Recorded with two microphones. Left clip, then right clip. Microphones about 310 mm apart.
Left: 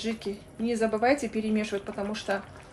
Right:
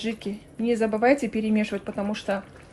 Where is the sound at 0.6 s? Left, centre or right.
Right.